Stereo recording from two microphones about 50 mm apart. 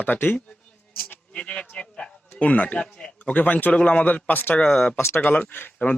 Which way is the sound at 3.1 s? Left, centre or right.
Left.